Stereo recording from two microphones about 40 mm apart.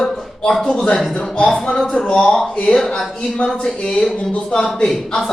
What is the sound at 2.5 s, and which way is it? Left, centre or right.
Speech, left.